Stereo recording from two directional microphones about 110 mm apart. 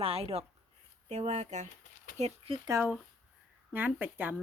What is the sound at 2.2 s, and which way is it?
Speech, 65° right (ahead or behind).